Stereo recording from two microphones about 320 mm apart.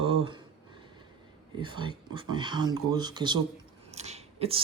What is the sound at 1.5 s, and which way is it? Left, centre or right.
Speech, centre.